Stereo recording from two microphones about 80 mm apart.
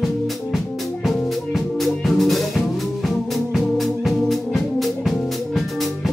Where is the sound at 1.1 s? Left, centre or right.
Centre.